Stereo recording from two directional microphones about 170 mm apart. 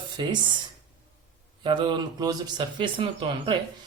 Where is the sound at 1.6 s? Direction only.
30° right (ahead or behind).